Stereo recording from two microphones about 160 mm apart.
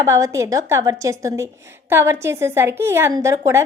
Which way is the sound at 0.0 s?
20° right (ahead or behind).